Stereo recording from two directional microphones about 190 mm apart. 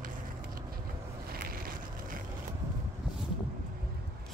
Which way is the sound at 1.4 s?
50° right (ahead or behind).